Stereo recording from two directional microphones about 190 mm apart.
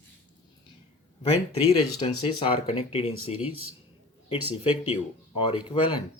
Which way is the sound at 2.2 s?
30° left (ahead or behind).